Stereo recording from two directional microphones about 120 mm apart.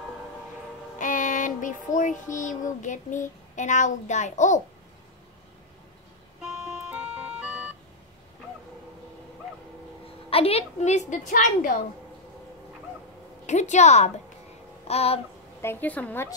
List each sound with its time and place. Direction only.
0.9 s child singing: 90° left
6.4 s music: 5° right (ahead or behind)
10.3 s a woman's voice: 55° left (ahead or behind); by 11.7 s 90° left
13.5 s a woman's voice: 75° left (ahead or behind)
14.9 s a sound: 60° left (ahead or behind)
15.6 s a woman's voice: 15° left (ahead or behind)